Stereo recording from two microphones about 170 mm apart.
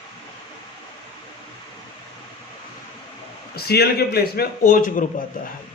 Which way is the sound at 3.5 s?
70° left (ahead or behind).